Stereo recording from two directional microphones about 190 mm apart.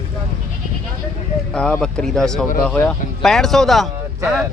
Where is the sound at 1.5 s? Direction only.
5° left (ahead or behind).